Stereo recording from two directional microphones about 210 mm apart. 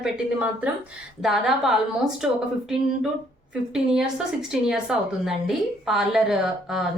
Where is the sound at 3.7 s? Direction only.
Centre (ahead or behind).